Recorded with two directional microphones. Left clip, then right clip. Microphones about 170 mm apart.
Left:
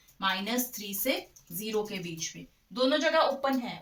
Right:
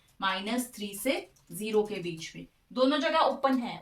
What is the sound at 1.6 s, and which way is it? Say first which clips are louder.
Speech: right 4 dB; 10° right (ahead or behind).